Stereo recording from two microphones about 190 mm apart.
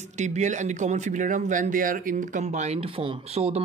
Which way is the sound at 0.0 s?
40° right (ahead or behind).